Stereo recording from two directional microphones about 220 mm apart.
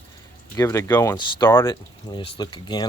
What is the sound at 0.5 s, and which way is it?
Speech, 15° left (ahead or behind).